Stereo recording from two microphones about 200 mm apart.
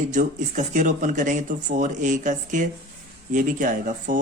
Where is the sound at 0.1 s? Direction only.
40° right (ahead or behind).